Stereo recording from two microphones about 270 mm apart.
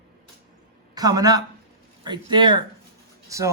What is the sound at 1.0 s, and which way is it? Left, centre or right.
Speech, centre.